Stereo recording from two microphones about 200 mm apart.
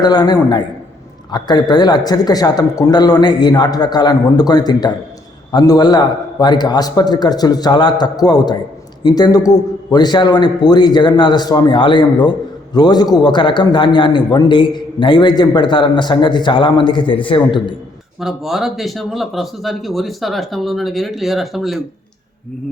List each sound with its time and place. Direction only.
0.0 s a man's voice: 20° left (ahead or behind)
18.2 s speech: centre (ahead or behind)